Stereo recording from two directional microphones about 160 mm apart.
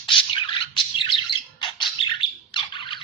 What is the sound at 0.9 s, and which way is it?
Bird, 30° left (ahead or behind).